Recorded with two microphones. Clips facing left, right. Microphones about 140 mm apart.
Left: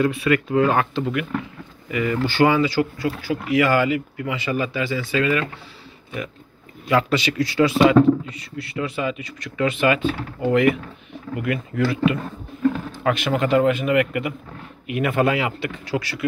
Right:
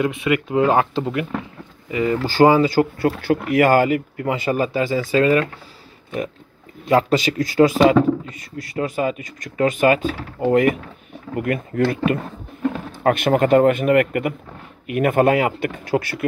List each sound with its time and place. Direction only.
0.0 s speech: 20° right (ahead or behind); by 3.2 s 45° right (ahead or behind)
3.2 s speech: 60° right (ahead or behind); by 5.4 s 40° right (ahead or behind)
6.9 s speech: 40° right (ahead or behind)